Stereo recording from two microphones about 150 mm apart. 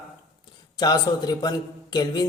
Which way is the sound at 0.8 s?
25° left (ahead or behind).